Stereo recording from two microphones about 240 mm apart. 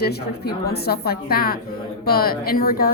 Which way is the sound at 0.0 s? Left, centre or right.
Left.